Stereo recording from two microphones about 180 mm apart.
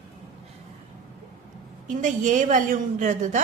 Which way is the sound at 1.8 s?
45° right (ahead or behind).